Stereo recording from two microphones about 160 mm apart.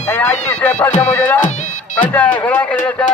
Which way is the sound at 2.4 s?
10° left (ahead or behind).